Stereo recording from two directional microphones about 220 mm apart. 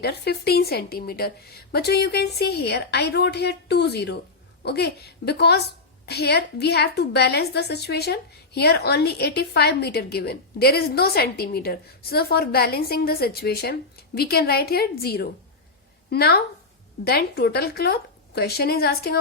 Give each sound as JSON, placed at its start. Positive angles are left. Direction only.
{"t": 0.0, "sound": "a woman's voice", "side_deg": 45}